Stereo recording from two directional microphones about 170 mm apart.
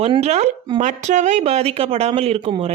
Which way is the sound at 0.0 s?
40° right (ahead or behind).